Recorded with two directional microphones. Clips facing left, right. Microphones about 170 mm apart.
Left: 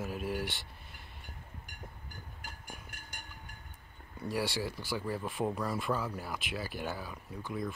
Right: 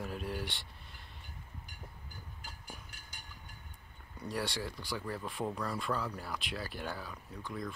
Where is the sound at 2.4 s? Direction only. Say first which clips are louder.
Left 2 dB; 55° left (ahead or behind).